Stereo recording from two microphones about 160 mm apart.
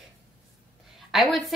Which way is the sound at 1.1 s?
Centre (ahead or behind).